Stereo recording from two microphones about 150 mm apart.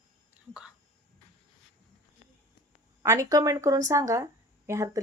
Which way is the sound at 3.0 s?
20° right (ahead or behind).